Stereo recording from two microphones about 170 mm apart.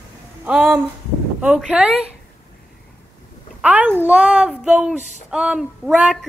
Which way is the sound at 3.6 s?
10° right (ahead or behind).